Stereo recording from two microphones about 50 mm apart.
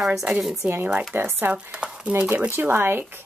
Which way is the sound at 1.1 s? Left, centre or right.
Right.